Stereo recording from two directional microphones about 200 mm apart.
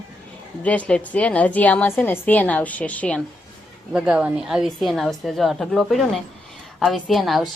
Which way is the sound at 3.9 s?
5° right (ahead or behind).